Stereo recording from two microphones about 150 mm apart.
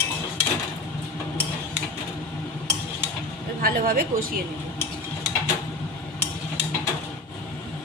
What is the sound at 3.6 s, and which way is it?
Speech, 75° right (ahead or behind).